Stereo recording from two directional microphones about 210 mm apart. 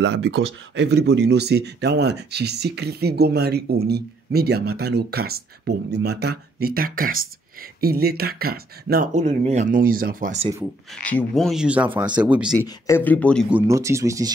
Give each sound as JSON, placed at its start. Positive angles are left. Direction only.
{"t": 0.0, "sound": "speech", "side_deg": -55}
{"t": 10.6, "sound": "speech", "side_deg": 5}
{"t": 12.6, "sound": "speech", "side_deg": 15}
{"t": 13.5, "sound": "speech", "side_deg": -10}